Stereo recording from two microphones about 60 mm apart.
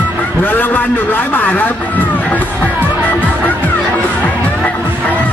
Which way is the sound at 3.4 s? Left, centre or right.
Left.